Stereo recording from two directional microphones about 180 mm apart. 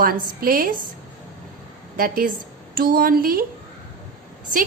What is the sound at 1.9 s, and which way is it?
A woman's voice, 55° right (ahead or behind).